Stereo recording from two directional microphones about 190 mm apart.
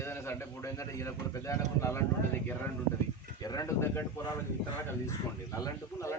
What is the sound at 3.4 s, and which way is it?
Speech, 15° left (ahead or behind).